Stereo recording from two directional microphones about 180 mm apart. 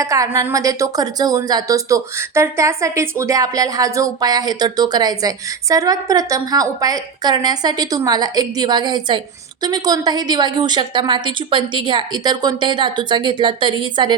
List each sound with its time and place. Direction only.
0.0 s a woman's voice: 20° right (ahead or behind)